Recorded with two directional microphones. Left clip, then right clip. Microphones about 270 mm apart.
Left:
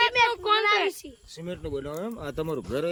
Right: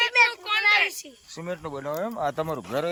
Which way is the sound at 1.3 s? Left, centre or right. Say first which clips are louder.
Right 1 dB; centre.